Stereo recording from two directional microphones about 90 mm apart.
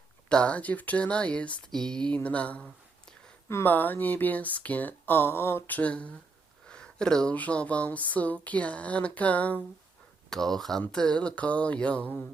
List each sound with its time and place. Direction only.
0.3 s speech: 10° left (ahead or behind)
3.5 s speech: 20° left (ahead or behind)
10.2 s speech: 5° left (ahead or behind)